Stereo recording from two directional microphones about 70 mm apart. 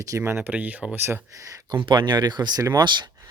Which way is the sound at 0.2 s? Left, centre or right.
Right.